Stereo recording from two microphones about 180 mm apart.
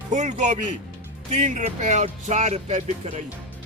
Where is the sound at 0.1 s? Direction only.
40° right (ahead or behind).